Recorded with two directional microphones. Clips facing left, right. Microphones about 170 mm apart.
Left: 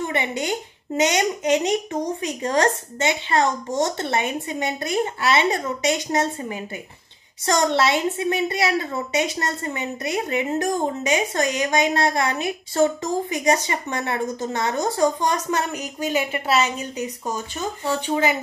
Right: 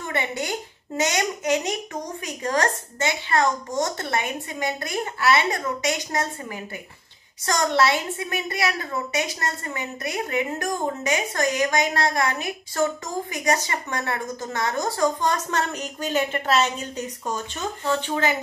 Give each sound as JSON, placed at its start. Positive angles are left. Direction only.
{"t": 0.0, "sound": "a woman's voice", "side_deg": 20}